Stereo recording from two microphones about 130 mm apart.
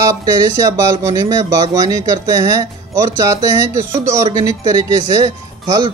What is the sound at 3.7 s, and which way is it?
Speech, 25° right (ahead or behind).